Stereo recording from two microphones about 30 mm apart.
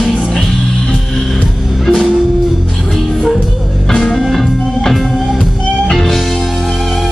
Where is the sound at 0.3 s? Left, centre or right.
Centre.